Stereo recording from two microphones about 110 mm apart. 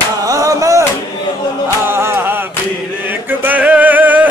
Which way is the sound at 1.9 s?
20° right (ahead or behind).